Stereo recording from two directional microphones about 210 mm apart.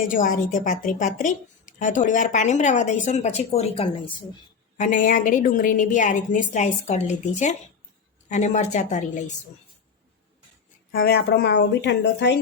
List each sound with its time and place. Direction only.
0.1 s a woman's voice: 40° left (ahead or behind)
4.8 s a woman's voice: 40° left (ahead or behind)
10.9 s speech: 45° left (ahead or behind)